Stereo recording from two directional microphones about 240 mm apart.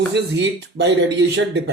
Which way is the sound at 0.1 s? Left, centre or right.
Right.